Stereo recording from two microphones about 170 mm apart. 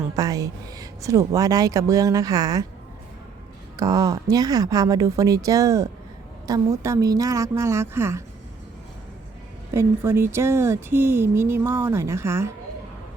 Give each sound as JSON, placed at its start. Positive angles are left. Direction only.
{"t": 0.2, "sound": "speech", "side_deg": -20}
{"t": 3.8, "sound": "speech", "side_deg": -20}
{"t": 9.7, "sound": "speech", "side_deg": -15}